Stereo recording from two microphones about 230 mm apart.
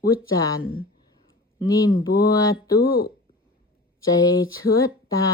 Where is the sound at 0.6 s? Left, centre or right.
Left.